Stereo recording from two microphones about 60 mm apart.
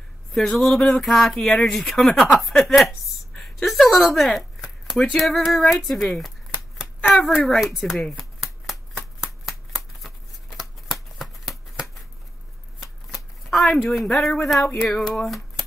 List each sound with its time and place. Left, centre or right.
0.3 s a woman's voice: centre
4.6 s a sound: centre
5.2 s speech: centre
8.2 s shuffling cards: centre
12.8 s shuffling cards: centre
13.8 s speech: centre
15.2 s a sound: centre